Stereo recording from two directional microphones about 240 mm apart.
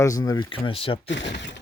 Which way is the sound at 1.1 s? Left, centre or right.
Left.